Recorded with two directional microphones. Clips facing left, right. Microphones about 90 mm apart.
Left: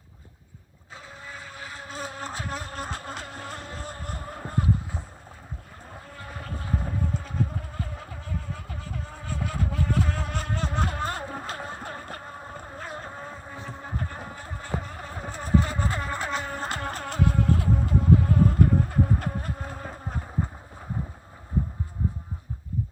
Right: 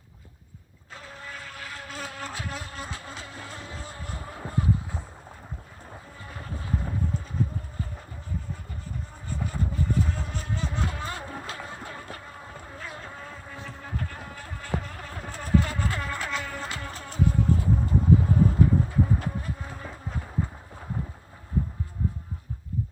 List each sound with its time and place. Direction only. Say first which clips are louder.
1.2 s motorboat: even; 20° left (ahead or behind); by 4.6 s 50° left (ahead or behind)
7.3 s vehicle: left 1 dB; 75° left (ahead or behind); by 11.2 s 50° left (ahead or behind)
11.4 s music: left 3 dB; 45° left (ahead or behind)
16.6 s vehicle: left 5 dB; 50° left (ahead or behind)
19.8 s insect: left 2 dB; 45° left (ahead or behind)